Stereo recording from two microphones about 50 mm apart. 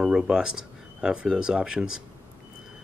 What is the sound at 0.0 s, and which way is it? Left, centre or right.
Speech, centre.